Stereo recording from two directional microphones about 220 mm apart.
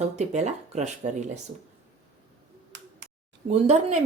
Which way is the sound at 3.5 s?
30° right (ahead or behind).